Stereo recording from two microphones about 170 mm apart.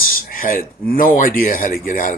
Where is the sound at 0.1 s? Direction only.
55° left (ahead or behind).